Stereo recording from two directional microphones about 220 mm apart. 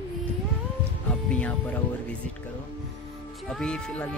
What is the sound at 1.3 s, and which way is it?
Speech, 5° left (ahead or behind).